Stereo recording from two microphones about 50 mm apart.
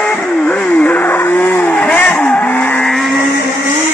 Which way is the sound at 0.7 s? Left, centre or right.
Left.